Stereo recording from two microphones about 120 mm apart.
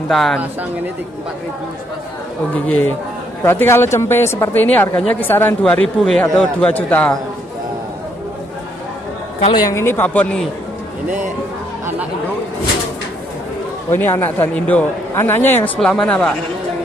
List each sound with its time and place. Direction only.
0.1 s speech: centre (ahead or behind)
2.5 s a woman's voice: 15° left (ahead or behind)
9.7 s speech: 20° left (ahead or behind)
13.9 s speech: 15° left (ahead or behind)